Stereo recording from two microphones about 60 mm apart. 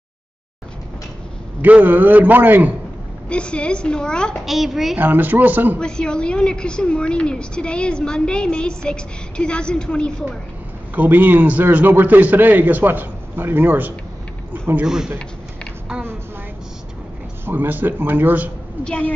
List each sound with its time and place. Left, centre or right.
1.6 s a man's voice: right
3.3 s a woman's voice: centre
4.5 s a woman's voice: centre
4.9 s a man's voice: right
5.8 s a woman's voice: centre
11.0 s a man's voice: right
17.5 s a man's voice: right
18.9 s a woman's voice: centre